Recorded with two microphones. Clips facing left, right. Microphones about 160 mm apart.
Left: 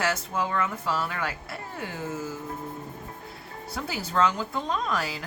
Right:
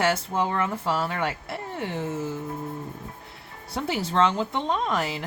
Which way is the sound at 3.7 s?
25° right (ahead or behind).